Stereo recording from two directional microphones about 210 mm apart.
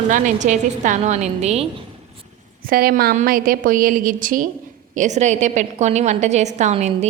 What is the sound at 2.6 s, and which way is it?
A woman's voice, 45° right (ahead or behind).